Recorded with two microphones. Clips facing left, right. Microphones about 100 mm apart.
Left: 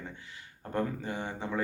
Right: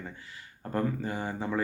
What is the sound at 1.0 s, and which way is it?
Speech, 40° right (ahead or behind).